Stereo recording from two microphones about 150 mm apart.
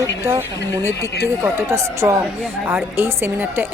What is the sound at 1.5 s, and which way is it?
A woman's voice, 20° right (ahead or behind).